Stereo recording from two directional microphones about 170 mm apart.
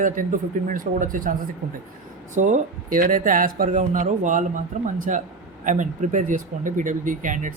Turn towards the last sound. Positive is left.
turn(degrees=-50)  # may be behind; listen again after turning